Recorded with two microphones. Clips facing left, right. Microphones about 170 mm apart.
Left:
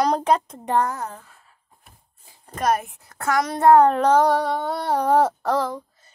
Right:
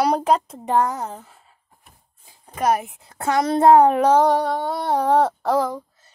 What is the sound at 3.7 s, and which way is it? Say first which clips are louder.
Speech: even; 10° right (ahead or behind).